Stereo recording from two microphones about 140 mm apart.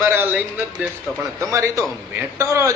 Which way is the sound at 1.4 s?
20° right (ahead or behind).